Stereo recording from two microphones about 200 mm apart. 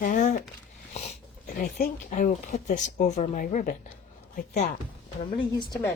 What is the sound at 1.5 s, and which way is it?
Speech, 45° left (ahead or behind).